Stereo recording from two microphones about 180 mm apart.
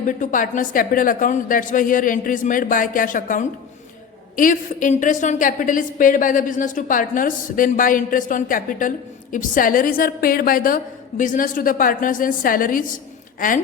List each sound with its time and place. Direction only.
0.0 s a woman's voice: 45° left (ahead or behind)